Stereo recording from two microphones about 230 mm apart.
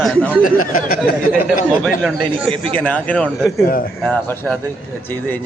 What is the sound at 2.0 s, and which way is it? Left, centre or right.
A man's voice, centre.